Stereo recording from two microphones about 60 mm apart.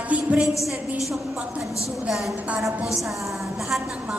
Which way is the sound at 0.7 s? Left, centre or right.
Centre.